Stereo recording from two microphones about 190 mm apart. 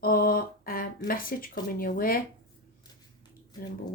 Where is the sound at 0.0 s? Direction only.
50° left (ahead or behind).